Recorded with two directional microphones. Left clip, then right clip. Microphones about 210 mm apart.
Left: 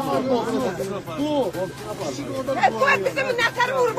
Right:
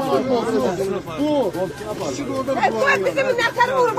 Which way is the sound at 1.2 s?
15° left (ahead or behind).